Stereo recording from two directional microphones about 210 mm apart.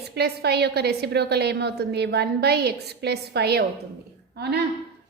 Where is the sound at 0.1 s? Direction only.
50° right (ahead or behind).